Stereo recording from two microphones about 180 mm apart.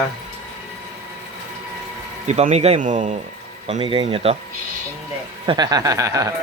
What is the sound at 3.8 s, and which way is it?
Speech, 30° right (ahead or behind).